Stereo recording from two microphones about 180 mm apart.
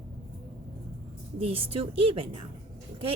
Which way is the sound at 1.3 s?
30° right (ahead or behind).